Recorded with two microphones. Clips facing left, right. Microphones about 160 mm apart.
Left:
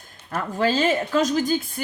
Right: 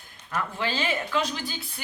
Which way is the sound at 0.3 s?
35° left (ahead or behind).